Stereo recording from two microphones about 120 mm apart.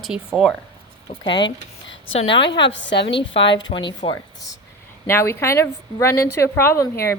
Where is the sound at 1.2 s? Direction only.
40° left (ahead or behind).